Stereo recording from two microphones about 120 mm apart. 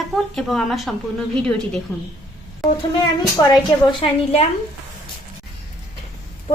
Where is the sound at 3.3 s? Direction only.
35° left (ahead or behind).